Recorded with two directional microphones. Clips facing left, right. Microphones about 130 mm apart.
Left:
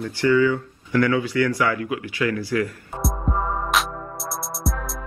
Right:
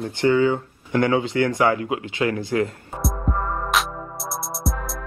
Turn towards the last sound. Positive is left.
turn(degrees=0)  # may be behind; listen again after turning